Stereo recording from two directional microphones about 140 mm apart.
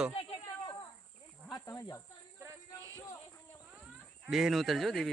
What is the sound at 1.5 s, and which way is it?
Snake, 25° left (ahead or behind).